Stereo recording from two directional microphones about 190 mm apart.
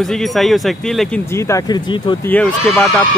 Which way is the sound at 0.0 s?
Centre (ahead or behind).